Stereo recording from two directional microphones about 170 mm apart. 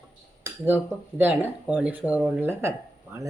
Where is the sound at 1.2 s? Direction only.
10° right (ahead or behind).